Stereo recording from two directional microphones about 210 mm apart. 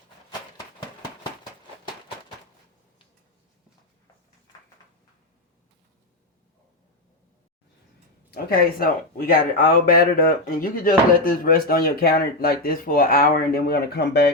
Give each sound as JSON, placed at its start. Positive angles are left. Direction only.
{"t": 8.3, "sound": "speech", "side_deg": 45}